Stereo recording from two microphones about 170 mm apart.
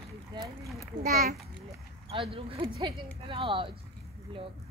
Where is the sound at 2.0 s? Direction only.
30° right (ahead or behind).